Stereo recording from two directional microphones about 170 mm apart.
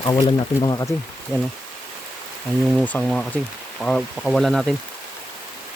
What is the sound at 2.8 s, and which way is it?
Speech, 5° left (ahead or behind).